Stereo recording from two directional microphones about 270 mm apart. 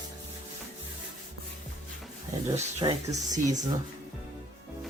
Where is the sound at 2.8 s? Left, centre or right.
Centre.